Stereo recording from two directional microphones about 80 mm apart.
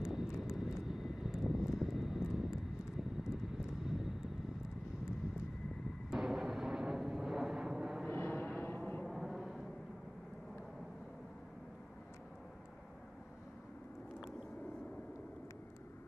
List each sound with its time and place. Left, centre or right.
0.0 s vehicle: centre
6.0 s vehicle: centre
8.1 s vehicle: left
9.0 s vehicle: centre